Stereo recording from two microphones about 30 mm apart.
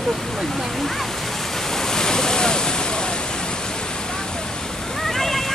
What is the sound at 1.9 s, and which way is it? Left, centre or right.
Waves, centre.